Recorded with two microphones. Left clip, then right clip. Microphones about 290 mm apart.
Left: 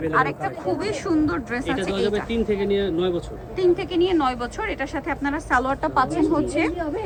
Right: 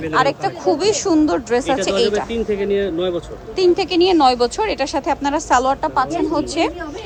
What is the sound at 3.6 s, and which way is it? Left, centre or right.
Speech, centre.